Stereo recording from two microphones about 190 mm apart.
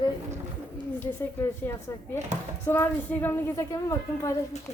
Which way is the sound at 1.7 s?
10° left (ahead or behind).